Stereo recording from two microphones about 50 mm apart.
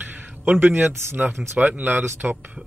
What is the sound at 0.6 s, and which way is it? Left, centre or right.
Speech, right.